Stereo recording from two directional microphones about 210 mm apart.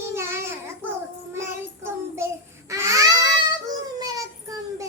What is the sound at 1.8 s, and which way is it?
Child singing, 10° right (ahead or behind).